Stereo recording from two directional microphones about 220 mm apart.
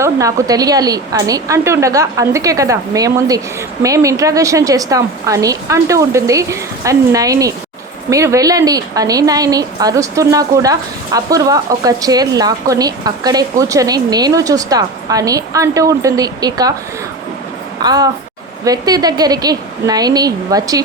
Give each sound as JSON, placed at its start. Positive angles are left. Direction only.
{"t": 0.0, "sound": "speech", "side_deg": -15}
{"t": 17.8, "sound": "speech", "side_deg": -15}